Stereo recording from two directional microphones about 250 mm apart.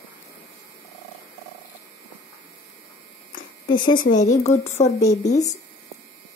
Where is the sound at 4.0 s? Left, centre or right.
Left.